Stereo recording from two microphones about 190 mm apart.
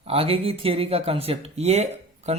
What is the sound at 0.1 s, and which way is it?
A man's voice, 30° right (ahead or behind).